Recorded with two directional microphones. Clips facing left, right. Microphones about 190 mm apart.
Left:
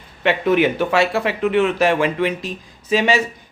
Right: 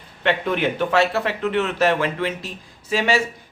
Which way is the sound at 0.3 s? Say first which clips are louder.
Left 5 dB; 10° left (ahead or behind).